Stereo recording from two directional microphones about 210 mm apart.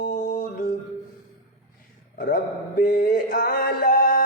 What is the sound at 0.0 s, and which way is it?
Music, 40° left (ahead or behind).